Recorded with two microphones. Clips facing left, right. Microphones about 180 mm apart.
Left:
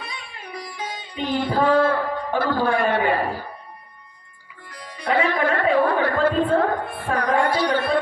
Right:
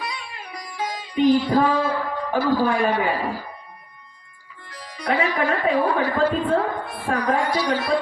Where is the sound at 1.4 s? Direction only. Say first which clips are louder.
Left 1 dB; 55° left (ahead or behind).